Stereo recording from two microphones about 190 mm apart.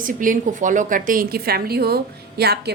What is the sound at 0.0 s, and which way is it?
A woman's voice, 45° right (ahead or behind).